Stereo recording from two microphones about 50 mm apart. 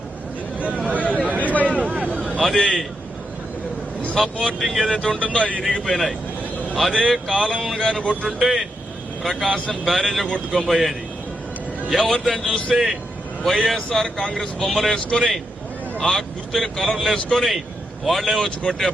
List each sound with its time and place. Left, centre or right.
0.6 s a sound: right
0.9 s a sound: left
1.2 s a sound: right
2.4 s speech: centre
4.1 s a man's voice: centre
5.2 s speech: left
5.8 s a man's voice: centre
8.4 s speech: centre
9.2 s a man's voice: centre
9.8 s speech: centre
10.2 s speech: centre
10.7 s a man's voice: centre
18.4 s a man's voice: centre